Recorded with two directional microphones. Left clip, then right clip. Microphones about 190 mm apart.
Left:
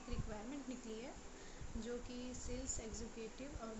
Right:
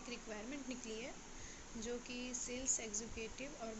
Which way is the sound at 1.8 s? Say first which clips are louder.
Right 2 dB; 15° left (ahead or behind).